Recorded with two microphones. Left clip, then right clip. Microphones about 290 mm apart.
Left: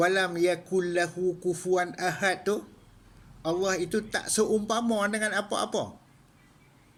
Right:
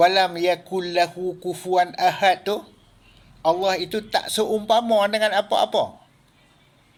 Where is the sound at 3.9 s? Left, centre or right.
Right.